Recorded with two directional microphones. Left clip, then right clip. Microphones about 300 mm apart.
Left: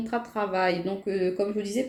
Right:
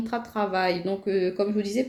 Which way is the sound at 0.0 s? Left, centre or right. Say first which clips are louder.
Right 1 dB; right.